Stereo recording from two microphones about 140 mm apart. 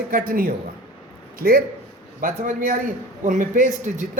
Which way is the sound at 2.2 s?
75° right (ahead or behind).